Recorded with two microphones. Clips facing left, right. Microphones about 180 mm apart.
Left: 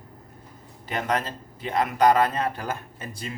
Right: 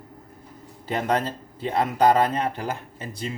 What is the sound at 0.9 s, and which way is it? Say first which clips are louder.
Speech: right 3 dB; 30° right (ahead or behind).